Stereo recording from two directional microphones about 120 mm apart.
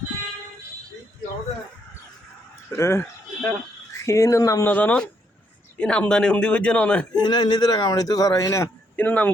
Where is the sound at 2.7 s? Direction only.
20° left (ahead or behind).